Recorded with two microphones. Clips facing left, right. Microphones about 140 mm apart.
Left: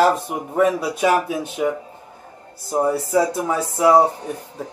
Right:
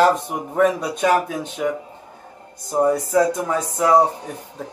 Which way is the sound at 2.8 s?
5° left (ahead or behind).